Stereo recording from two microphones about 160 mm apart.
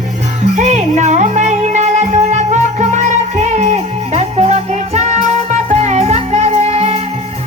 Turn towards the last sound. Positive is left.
turn(degrees=-40)  # may be behind; listen again after turning